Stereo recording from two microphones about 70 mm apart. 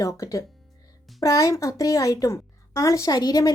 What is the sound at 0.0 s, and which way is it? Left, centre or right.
A woman's voice, left.